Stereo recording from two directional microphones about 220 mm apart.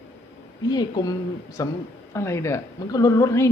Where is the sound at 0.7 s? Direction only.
20° left (ahead or behind).